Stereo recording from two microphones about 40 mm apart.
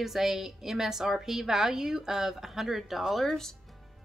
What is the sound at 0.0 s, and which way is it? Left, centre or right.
A woman's voice, centre.